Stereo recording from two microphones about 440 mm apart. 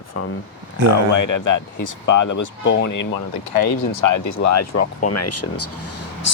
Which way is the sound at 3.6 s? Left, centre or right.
Left.